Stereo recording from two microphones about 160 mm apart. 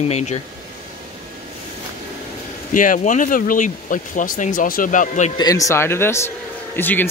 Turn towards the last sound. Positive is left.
turn(degrees=15)  # may be behind; listen again after turning